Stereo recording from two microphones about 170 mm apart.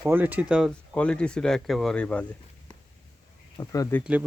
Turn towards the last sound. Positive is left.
turn(degrees=15)  # may be behind; listen again after turning